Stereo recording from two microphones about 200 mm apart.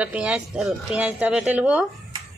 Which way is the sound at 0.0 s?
5° right (ahead or behind).